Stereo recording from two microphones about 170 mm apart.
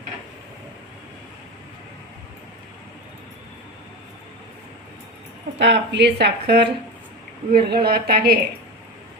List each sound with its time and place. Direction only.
5.5 s speech: 90° right
7.5 s a woman's voice: 65° right (ahead or behind)